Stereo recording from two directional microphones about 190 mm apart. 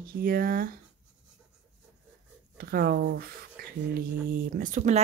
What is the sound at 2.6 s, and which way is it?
Speech, 50° right (ahead or behind).